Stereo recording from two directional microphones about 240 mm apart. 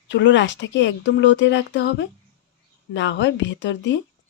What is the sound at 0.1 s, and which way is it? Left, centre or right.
Speech, left.